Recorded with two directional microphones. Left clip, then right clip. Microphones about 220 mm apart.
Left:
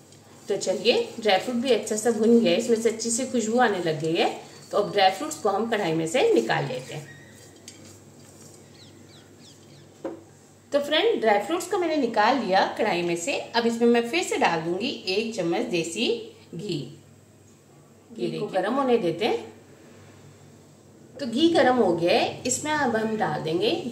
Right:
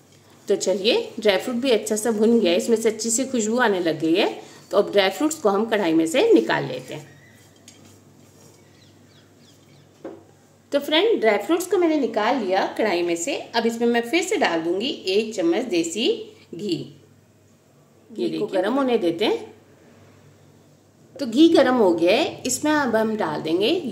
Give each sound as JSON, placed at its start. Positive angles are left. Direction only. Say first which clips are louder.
{"t": 0.5, "sound": "a woman's voice", "louder": "right 3 dB", "side_deg": -50}
{"t": 10.7, "sound": "a woman's voice", "louder": "right 3 dB", "side_deg": -40}
{"t": 18.1, "sound": "a woman's voice", "louder": "right 4 dB", "side_deg": -50}
{"t": 21.2, "sound": "a woman's voice", "louder": "right 5 dB", "side_deg": -50}